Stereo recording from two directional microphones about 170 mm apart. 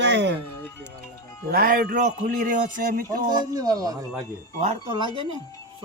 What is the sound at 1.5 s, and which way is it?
A man's voice, 60° right (ahead or behind).